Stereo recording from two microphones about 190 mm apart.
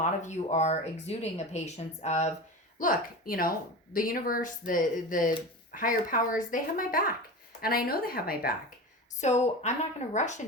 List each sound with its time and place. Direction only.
0.0 s speech: 40° left (ahead or behind)
9.2 s speech: 35° left (ahead or behind)